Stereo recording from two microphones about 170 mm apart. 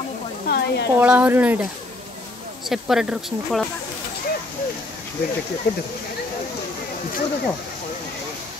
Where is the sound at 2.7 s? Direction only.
5° right (ahead or behind).